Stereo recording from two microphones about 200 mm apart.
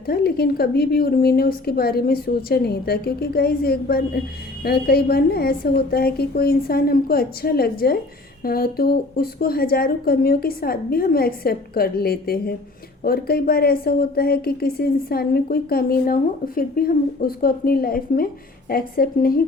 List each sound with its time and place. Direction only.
0.0 s a woman's voice: 50° left (ahead or behind)